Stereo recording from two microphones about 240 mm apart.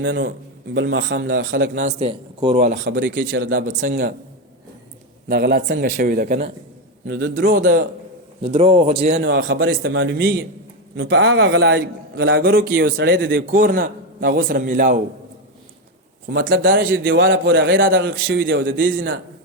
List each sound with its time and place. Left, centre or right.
0.0 s a man's voice: right
1.6 s a man's voice: right
5.3 s a man's voice: right
8.4 s a man's voice: right
9.2 s a man's voice: right
10.9 s a man's voice: right
16.4 s a man's voice: right
17.8 s a man's voice: right